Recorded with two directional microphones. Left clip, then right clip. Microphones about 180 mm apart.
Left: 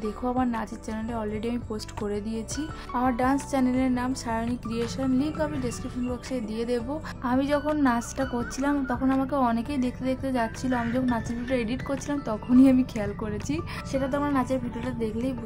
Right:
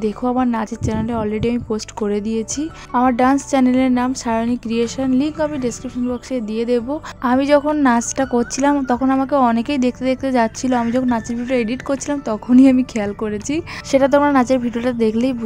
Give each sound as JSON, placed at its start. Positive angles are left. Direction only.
{"t": 0.0, "sound": "a woman's voice", "side_deg": -40}